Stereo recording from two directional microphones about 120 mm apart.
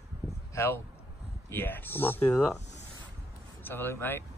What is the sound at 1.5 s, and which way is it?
Speech, 15° left (ahead or behind).